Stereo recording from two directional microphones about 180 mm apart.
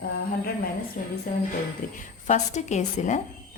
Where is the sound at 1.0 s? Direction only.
45° left (ahead or behind).